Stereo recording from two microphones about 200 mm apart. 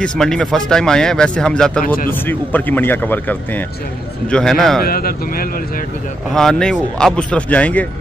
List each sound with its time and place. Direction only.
0.0 s speech: 5° left (ahead or behind)
4.8 s speech: 45° left (ahead or behind)
6.3 s speech: 5° left (ahead or behind)